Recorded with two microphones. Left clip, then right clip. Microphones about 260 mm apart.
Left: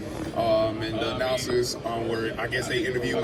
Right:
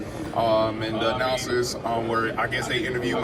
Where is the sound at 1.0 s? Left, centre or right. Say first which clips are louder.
Right 3 dB; right.